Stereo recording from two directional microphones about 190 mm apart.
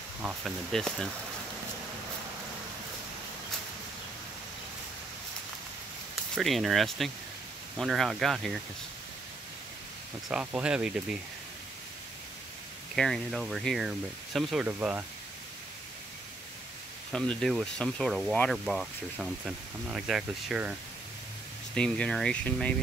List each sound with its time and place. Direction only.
0.2 s speech: 10° right (ahead or behind)
0.7 s speech: centre (ahead or behind)
6.3 s speech: centre (ahead or behind)
10.2 s speech: 5° right (ahead or behind)
12.9 s speech: centre (ahead or behind)
17.1 s speech: 5° left (ahead or behind)
21.7 s speech: 5° left (ahead or behind)